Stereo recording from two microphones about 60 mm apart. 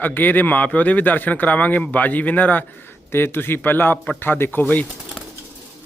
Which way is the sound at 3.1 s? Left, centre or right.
Left.